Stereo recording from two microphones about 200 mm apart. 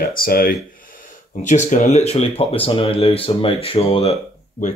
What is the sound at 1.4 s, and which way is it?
Speech, 40° left (ahead or behind).